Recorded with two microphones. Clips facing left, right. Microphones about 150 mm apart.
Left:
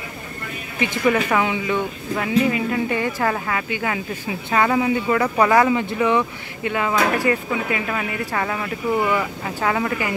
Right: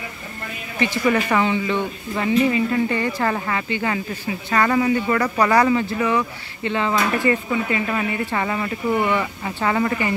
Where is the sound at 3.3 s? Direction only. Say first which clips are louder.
Right 1 dB; centre (ahead or behind).